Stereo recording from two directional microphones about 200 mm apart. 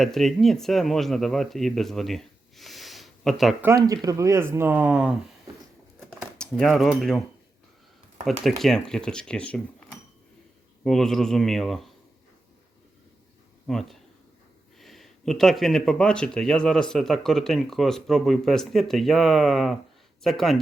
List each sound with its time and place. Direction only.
0.0 s speech: centre (ahead or behind)
3.7 s speech: 20° right (ahead or behind)
6.0 s typing: centre (ahead or behind)
8.2 s speech: centre (ahead or behind)
10.8 s speech: centre (ahead or behind)
13.7 s speech: centre (ahead or behind)